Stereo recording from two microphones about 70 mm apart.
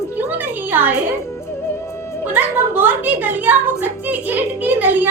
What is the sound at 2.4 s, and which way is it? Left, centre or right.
A woman's voice, right.